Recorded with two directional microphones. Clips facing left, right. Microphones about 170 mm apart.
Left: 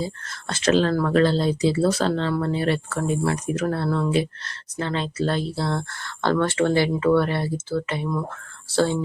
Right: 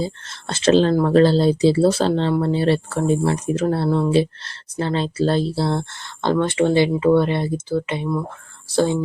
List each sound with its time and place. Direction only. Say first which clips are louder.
0.0 s speech: right 3 dB; 30° right (ahead or behind)